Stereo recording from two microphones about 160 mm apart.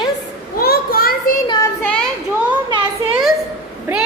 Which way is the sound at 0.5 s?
70° left (ahead or behind).